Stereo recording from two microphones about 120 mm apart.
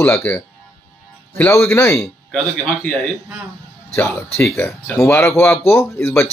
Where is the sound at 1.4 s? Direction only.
20° left (ahead or behind).